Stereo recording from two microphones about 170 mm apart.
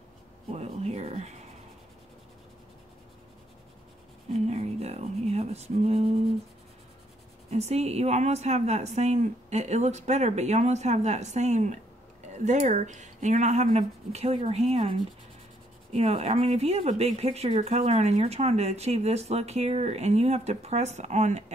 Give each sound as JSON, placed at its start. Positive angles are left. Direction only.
{"t": 0.5, "sound": "speech", "side_deg": -40}
{"t": 4.3, "sound": "speech", "side_deg": -40}
{"t": 7.4, "sound": "speech", "side_deg": -40}